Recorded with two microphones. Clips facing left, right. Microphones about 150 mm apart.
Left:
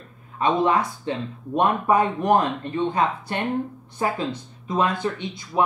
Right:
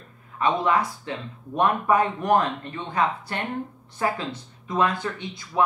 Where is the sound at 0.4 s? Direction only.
25° left (ahead or behind).